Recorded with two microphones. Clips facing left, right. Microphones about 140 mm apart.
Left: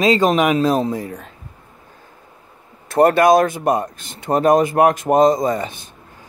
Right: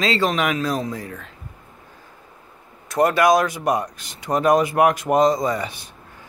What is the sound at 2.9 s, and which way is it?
Speech, 55° left (ahead or behind).